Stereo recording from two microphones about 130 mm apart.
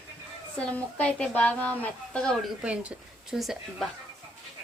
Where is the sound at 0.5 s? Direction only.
10° left (ahead or behind).